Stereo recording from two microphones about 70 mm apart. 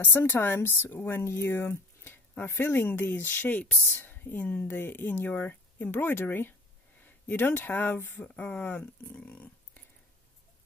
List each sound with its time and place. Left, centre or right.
0.0 s a woman's voice: left